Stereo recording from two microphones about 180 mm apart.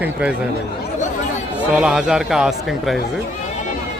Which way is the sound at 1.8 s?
5° right (ahead or behind).